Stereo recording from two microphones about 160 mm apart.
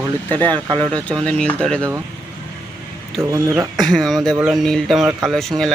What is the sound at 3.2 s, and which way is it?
Speech, 20° right (ahead or behind).